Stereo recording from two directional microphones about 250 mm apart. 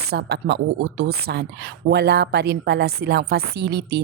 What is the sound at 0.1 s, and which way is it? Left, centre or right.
A woman's voice, right.